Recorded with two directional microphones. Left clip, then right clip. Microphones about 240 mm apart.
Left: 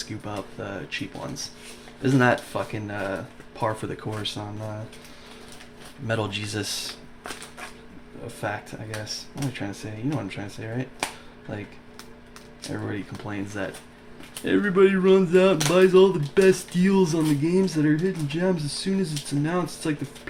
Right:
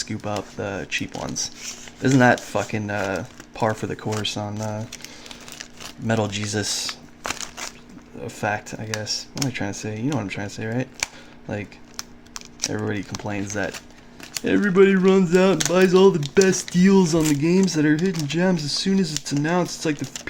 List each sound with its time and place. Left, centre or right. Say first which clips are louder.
0.0 s speech: right 5 dB; right
6.1 s speech: right 4 dB; right
8.4 s speech: right 6 dB; right
11.5 s a sound: right 6 dB; right
13.2 s speech: right 5 dB; right